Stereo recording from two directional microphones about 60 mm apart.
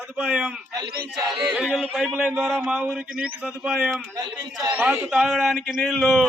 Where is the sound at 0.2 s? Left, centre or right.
Centre.